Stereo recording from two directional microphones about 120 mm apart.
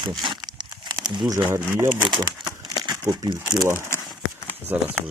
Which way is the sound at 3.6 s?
20° right (ahead or behind).